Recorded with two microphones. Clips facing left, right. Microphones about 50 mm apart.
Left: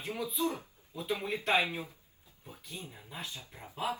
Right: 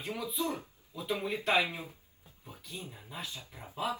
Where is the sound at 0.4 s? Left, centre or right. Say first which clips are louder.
Left 2 dB; right.